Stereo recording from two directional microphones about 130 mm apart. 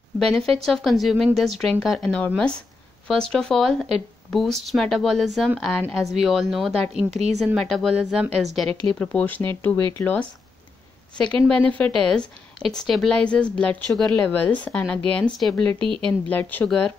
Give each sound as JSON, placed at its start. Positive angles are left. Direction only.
{"t": 0.2, "sound": "a woman's voice", "side_deg": 5}
{"t": 8.9, "sound": "a woman's voice", "side_deg": 10}
{"t": 11.4, "sound": "a woman's voice", "side_deg": 10}